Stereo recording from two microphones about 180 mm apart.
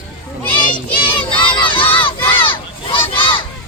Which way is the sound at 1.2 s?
30° left (ahead or behind).